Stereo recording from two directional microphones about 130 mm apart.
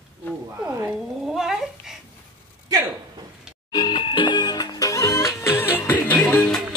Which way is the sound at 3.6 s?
30° left (ahead or behind).